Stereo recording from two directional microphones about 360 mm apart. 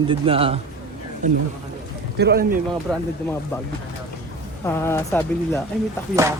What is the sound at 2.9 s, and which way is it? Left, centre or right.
Speech, centre.